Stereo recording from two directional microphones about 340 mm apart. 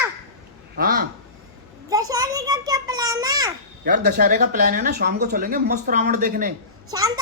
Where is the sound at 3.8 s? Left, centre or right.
Right.